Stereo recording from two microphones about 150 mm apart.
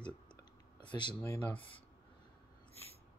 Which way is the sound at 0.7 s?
30° left (ahead or behind).